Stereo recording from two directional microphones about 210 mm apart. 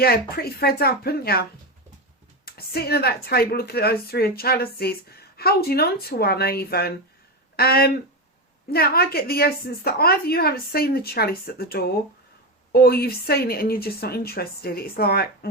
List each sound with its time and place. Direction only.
0.0 s a woman's voice: 45° left (ahead or behind)